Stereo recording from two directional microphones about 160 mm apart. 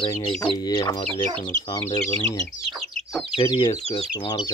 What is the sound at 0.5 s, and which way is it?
Speech, 25° left (ahead or behind).